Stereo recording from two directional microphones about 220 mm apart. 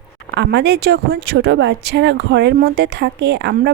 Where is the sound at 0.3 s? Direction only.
50° right (ahead or behind).